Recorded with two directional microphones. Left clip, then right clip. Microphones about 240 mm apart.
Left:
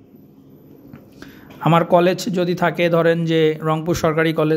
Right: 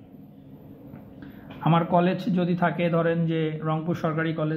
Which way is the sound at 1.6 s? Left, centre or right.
Left.